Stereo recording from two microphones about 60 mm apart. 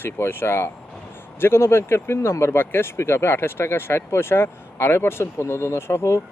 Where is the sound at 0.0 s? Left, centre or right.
Left.